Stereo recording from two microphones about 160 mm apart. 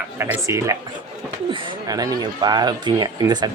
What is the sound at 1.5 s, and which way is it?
Speech, 30° right (ahead or behind).